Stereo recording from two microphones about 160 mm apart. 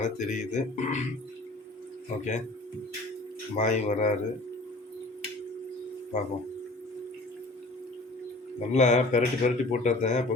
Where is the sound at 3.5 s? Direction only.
50° left (ahead or behind).